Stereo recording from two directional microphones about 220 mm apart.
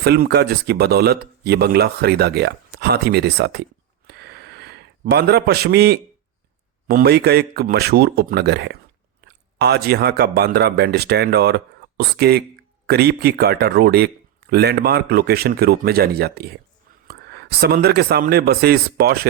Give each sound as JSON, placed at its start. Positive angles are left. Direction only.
{"t": 0.0, "sound": "speech", "side_deg": -45}
{"t": 4.0, "sound": "a sound", "side_deg": -50}
{"t": 6.8, "sound": "a man's voice", "side_deg": -45}